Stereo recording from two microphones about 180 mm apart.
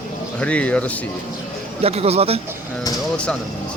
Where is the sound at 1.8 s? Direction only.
35° right (ahead or behind).